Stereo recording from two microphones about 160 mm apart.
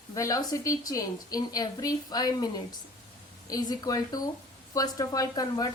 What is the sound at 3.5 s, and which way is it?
Speech, 25° left (ahead or behind).